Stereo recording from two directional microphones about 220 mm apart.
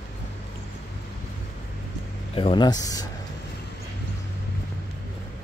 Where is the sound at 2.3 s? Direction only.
25° left (ahead or behind).